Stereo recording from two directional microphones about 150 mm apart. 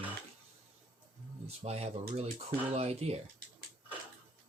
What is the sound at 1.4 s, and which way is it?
Speech, 45° right (ahead or behind).